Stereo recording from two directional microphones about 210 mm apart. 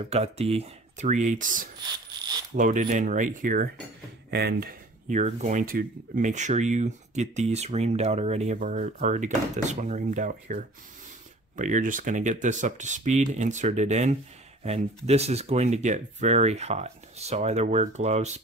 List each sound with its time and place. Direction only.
0.1 s speech: 30° right (ahead or behind)